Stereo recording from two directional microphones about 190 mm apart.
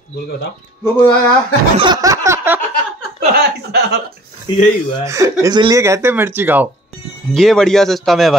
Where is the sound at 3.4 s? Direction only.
60° right (ahead or behind).